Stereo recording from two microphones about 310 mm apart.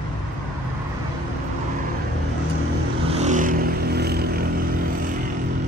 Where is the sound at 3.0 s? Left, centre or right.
Right.